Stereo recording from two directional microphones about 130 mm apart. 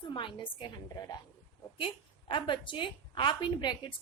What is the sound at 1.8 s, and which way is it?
A woman's voice, 40° left (ahead or behind).